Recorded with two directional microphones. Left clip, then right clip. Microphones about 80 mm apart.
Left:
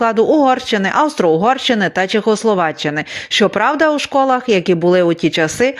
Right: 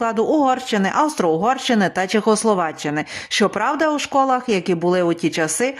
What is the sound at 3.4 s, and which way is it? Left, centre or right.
Speech, left.